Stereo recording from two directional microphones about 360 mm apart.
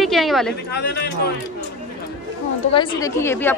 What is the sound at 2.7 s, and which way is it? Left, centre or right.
Speech, centre.